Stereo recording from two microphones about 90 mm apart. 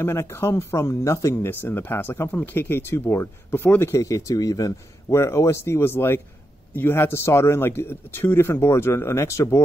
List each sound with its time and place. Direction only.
0.0 s speech: 30° left (ahead or behind)
4.1 s speech: 40° left (ahead or behind)